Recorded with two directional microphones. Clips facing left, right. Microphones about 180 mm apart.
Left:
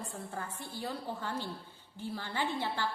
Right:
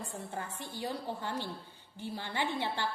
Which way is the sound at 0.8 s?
15° right (ahead or behind).